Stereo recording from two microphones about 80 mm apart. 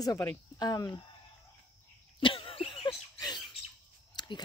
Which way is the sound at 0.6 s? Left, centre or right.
Left.